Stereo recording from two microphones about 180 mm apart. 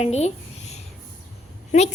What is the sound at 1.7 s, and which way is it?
Speech, 45° left (ahead or behind).